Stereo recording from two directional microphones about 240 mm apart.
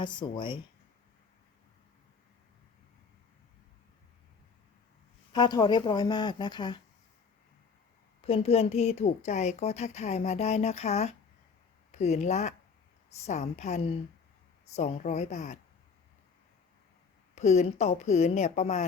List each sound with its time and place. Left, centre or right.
0.0 s speech: centre
5.3 s speech: centre
8.2 s speech: left
17.3 s speech: left